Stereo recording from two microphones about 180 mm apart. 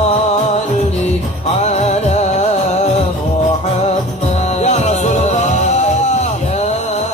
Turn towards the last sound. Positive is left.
turn(degrees=40)  # may be behind; listen again after turning